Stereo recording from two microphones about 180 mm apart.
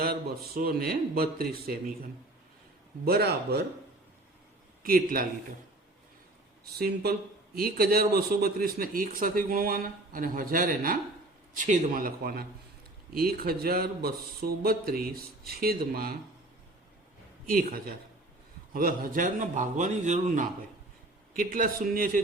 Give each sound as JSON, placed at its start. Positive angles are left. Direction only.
{"t": 0.0, "sound": "speech", "side_deg": -55}
{"t": 4.8, "sound": "speech", "side_deg": -55}
{"t": 6.7, "sound": "speech", "side_deg": -60}
{"t": 17.4, "sound": "speech", "side_deg": -50}